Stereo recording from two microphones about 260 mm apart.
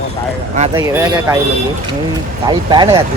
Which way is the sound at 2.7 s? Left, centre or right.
Centre.